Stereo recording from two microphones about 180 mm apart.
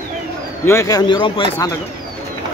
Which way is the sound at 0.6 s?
15° left (ahead or behind).